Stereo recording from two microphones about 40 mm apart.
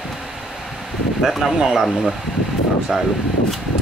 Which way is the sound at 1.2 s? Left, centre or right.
Centre.